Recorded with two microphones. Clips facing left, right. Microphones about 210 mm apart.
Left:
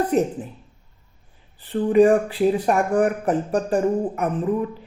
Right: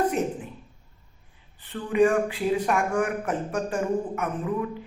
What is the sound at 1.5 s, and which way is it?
Speech, 35° left (ahead or behind).